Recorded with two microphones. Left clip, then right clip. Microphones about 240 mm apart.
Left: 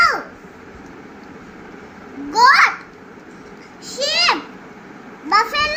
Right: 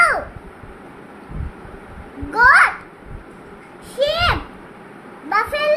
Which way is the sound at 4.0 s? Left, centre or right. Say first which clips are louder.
Even; centre.